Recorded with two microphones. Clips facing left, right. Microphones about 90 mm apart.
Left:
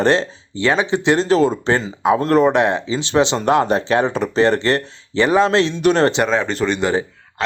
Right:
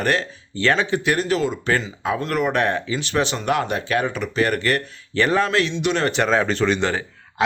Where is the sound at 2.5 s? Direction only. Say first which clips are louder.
Left 4 dB; 20° left (ahead or behind).